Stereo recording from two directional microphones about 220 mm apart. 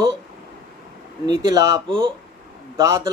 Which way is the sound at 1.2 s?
20° right (ahead or behind).